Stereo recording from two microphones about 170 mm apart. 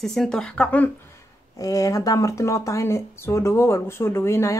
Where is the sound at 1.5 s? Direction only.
20° left (ahead or behind).